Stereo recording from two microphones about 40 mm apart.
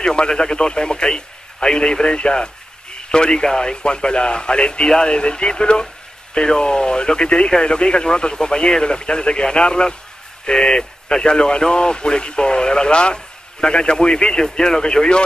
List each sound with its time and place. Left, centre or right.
0.0 s speech: left
3.8 s speech: left